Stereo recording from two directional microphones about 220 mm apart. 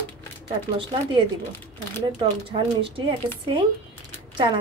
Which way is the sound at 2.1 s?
25° right (ahead or behind).